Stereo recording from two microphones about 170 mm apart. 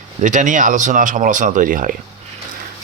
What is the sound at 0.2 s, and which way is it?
Speech, 45° right (ahead or behind).